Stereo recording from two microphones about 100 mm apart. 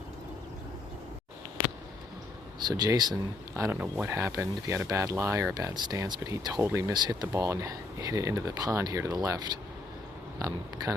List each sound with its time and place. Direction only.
2.6 s speech: 45° right (ahead or behind)
3.5 s speech: 25° right (ahead or behind)
5.5 s speech: 40° right (ahead or behind)
6.9 s speech: 45° right (ahead or behind)
7.3 s speech: 30° right (ahead or behind)